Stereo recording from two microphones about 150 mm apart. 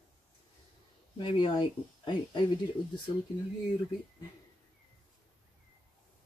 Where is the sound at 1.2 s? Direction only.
35° left (ahead or behind).